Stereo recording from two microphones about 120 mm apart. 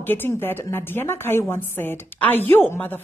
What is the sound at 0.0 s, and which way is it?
A woman's voice, 15° left (ahead or behind).